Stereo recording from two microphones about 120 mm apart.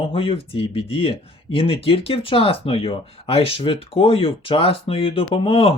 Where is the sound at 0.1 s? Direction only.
50° left (ahead or behind).